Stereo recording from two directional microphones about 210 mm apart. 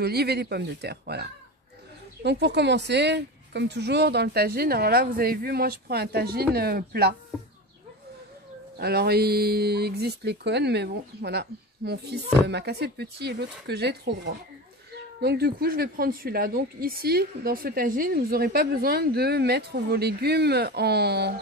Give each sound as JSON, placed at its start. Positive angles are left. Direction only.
{"t": 0.0, "sound": "a woman's voice", "side_deg": -50}
{"t": 8.7, "sound": "a woman's voice", "side_deg": -50}